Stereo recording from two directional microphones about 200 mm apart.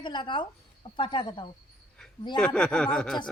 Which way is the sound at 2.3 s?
5° left (ahead or behind).